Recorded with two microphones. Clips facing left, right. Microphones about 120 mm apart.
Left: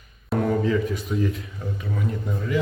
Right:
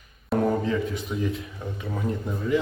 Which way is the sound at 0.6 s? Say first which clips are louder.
Left 3 dB; 25° right (ahead or behind).